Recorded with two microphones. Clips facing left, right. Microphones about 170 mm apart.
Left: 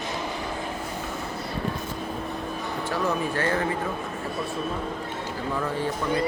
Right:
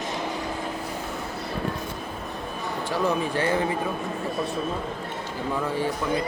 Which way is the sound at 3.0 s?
15° right (ahead or behind).